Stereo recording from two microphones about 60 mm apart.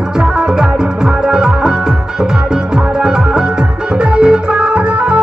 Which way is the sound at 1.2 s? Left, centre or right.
Centre.